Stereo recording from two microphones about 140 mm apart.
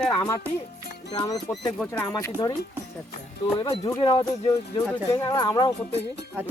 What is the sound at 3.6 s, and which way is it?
Speech, 30° left (ahead or behind).